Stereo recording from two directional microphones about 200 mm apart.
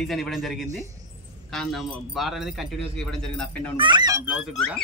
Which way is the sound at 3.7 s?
25° right (ahead or behind).